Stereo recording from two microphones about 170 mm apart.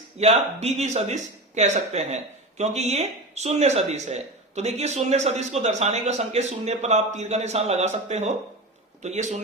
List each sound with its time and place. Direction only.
0.2 s speech: 40° right (ahead or behind)